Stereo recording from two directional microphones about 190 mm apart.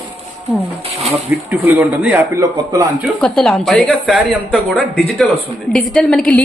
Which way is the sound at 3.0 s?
5° left (ahead or behind).